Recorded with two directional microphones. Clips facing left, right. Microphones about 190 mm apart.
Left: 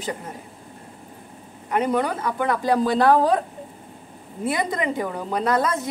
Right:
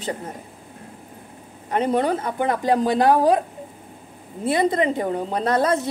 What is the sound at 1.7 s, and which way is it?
Speech, 30° right (ahead or behind).